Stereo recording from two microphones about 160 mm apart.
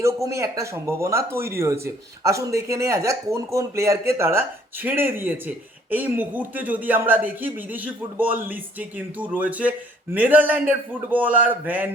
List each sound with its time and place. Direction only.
0.0 s speech: 20° right (ahead or behind)